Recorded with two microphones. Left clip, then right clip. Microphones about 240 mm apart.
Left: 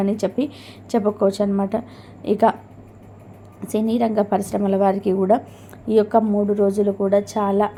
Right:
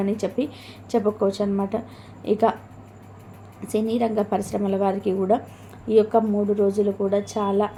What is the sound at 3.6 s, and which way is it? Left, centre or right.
A woman's voice, centre.